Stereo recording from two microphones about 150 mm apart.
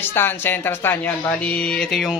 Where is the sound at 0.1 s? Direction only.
15° left (ahead or behind).